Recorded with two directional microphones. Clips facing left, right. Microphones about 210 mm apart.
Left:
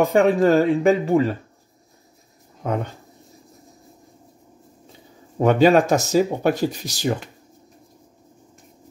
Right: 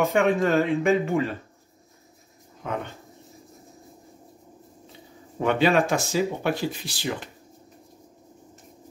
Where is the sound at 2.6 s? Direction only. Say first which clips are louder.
Left 6 dB; 40° left (ahead or behind).